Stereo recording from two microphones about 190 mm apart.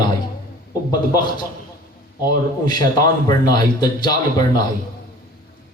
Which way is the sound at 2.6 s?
20° left (ahead or behind).